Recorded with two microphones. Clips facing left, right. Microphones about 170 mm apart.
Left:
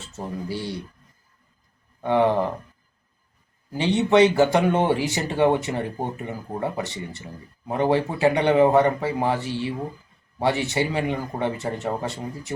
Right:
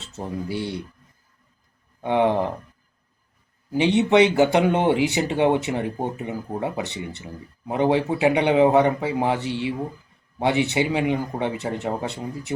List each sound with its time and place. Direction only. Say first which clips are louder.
0.0 s speech: right 1 dB; 20° right (ahead or behind)
2.0 s speech: even; 15° right (ahead or behind)
3.7 s speech: right 2 dB; 15° right (ahead or behind)